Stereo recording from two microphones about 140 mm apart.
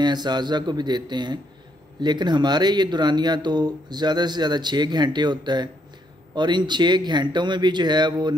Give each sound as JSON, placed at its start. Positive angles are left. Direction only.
{"t": 0.0, "sound": "speech", "side_deg": -30}